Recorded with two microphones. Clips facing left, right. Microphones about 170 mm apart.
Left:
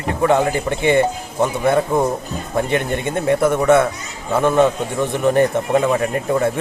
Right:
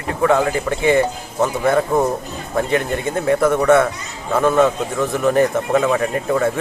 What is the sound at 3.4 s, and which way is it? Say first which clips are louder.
Speech: even; 10° left (ahead or behind).